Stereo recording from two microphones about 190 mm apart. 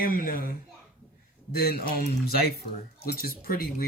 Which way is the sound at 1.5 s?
55° left (ahead or behind).